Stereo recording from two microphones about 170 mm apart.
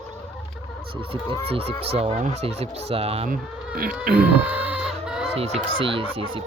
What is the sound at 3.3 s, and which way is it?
Speech, 60° right (ahead or behind).